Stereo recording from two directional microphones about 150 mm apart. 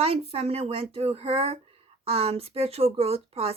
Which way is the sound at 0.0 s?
40° right (ahead or behind).